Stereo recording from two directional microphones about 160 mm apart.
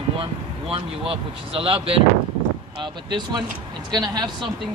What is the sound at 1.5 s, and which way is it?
Speech, 35° right (ahead or behind).